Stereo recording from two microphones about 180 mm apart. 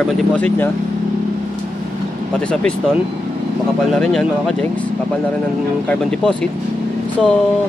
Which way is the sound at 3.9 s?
Centre (ahead or behind).